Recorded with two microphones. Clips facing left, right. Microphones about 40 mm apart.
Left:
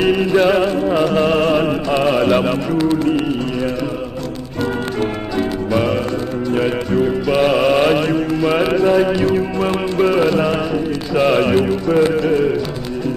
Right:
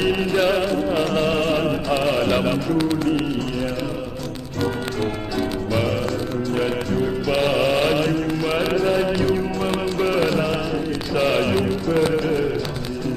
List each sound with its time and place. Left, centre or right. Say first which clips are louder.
0.1 s music: left 5 dB; centre
6.5 s music: left 6 dB; centre
8.7 s mantra: left 5 dB; centre
9.1 s music: left 4 dB; left
11.5 s a sound: left 5 dB; centre
12.3 s music: left 6 dB; centre